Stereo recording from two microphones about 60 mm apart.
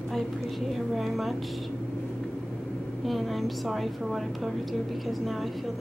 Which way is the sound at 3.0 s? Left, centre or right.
Centre.